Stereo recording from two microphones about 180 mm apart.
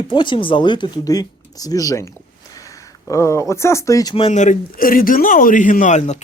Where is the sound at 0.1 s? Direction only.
25° left (ahead or behind).